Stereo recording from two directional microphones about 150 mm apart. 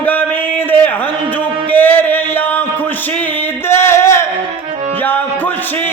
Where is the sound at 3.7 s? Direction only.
15° left (ahead or behind).